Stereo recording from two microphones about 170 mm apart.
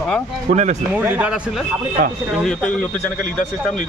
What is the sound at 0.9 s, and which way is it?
Speech, 10° right (ahead or behind).